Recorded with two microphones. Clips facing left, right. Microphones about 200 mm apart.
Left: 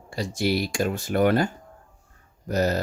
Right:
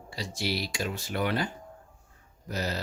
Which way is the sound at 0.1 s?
50° left (ahead or behind).